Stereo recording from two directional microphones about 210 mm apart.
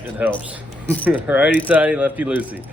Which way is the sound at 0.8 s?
5° left (ahead or behind).